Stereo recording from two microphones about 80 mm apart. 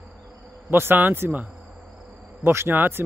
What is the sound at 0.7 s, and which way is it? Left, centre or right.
Speech, right.